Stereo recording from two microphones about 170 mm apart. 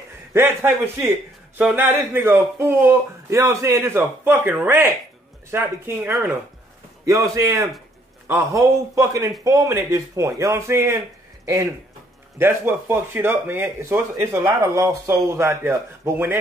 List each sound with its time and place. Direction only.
0.3 s a man's voice: 15° right (ahead or behind)